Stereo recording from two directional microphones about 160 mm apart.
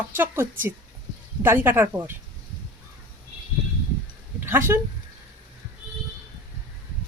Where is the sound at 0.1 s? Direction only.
15° right (ahead or behind).